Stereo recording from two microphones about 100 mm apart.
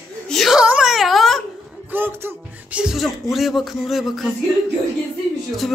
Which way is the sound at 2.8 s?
5° right (ahead or behind).